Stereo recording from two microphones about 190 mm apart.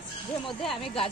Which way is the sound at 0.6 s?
Centre (ahead or behind).